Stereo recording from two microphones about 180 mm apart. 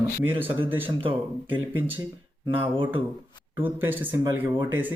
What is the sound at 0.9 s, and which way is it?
Speech, 30° right (ahead or behind).